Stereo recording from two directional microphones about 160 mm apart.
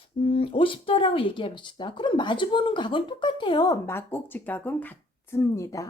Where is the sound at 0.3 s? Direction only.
35° left (ahead or behind).